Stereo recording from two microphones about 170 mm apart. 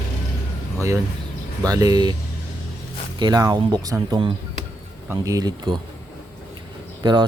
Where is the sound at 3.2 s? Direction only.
25° right (ahead or behind).